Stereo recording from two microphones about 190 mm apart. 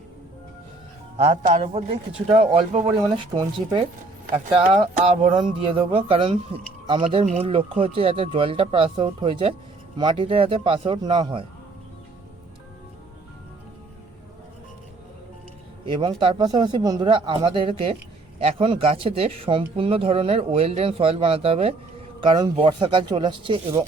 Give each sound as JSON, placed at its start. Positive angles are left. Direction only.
{"t": 1.1, "sound": "speech", "side_deg": -35}
{"t": 3.3, "sound": "speech", "side_deg": -20}
{"t": 4.7, "sound": "speech", "side_deg": -30}
{"t": 15.9, "sound": "speech", "side_deg": -25}